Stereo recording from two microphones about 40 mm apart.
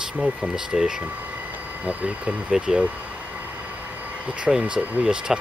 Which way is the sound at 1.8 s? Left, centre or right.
Right.